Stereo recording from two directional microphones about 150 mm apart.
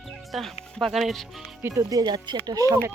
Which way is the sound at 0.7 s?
Centre (ahead or behind).